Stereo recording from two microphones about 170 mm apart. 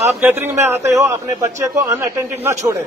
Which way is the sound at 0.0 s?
15° right (ahead or behind).